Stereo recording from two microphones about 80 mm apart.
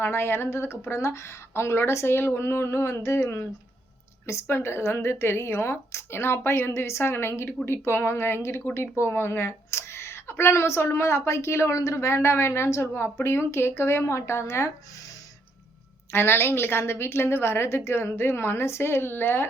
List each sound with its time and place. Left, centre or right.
0.0 s speech: left
16.1 s speech: left